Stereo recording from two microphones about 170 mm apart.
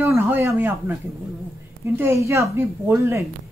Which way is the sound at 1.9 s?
15° right (ahead or behind).